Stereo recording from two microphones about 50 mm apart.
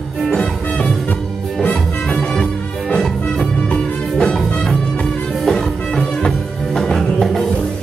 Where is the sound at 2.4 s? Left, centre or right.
Centre.